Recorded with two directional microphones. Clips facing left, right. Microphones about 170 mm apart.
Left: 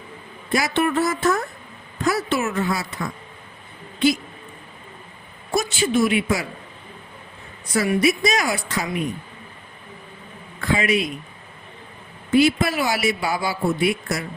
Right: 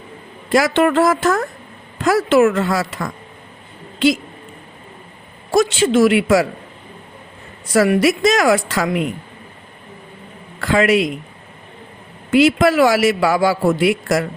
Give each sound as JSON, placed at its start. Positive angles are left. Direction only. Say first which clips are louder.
{"t": 0.5, "sound": "a man's voice", "louder": "right 6 dB", "side_deg": -90}
{"t": 5.5, "sound": "a man's voice", "louder": "right 7 dB", "side_deg": -90}
{"t": 7.7, "sound": "a man's voice", "louder": "right 5 dB", "side_deg": -90}
{"t": 10.6, "sound": "a man's voice", "louder": "right 6 dB", "side_deg": -85}
{"t": 12.3, "sound": "a man's voice", "louder": "right 5 dB", "side_deg": -90}